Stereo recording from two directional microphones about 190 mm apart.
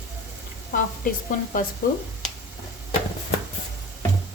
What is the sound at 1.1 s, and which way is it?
Speech, 45° left (ahead or behind).